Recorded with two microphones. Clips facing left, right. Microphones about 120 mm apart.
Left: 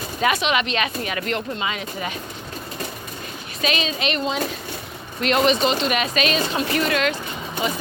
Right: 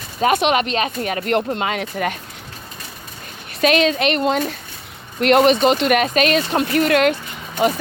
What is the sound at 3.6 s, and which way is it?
Speech, 60° right (ahead or behind).